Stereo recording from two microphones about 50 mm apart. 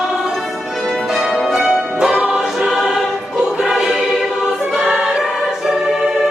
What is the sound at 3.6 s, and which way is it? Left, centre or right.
Music, centre.